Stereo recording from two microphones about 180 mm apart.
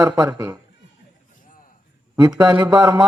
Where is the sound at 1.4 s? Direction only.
50° left (ahead or behind).